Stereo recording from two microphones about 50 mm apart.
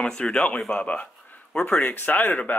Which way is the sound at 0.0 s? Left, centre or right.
Centre.